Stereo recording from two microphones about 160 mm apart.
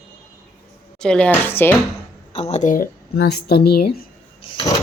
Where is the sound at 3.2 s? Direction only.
85° left.